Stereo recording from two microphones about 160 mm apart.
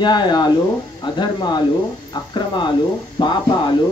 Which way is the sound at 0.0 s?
25° left (ahead or behind).